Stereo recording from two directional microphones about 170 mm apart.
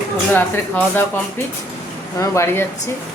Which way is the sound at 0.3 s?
10° left (ahead or behind).